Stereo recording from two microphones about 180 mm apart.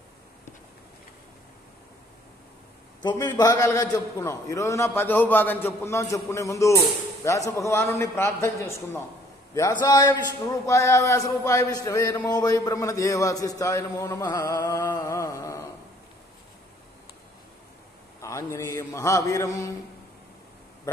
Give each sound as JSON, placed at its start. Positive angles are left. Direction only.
{"t": 3.0, "sound": "a man's voice", "side_deg": 25}
{"t": 18.2, "sound": "a man's voice", "side_deg": 15}